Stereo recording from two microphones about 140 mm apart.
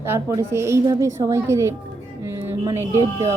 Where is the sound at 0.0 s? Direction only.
15° right (ahead or behind).